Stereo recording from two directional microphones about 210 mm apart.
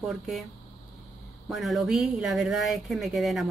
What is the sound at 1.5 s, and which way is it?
Speech, centre (ahead or behind).